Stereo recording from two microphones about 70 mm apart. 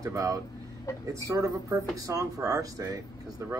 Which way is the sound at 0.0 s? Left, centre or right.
Right.